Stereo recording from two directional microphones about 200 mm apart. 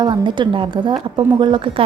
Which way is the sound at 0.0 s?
25° right (ahead or behind).